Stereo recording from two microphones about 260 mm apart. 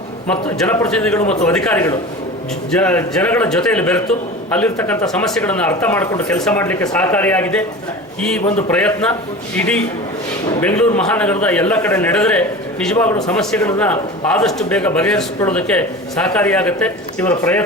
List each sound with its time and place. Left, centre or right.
0.3 s a man's voice: centre
1.2 s speech: left
1.5 s a man's voice: centre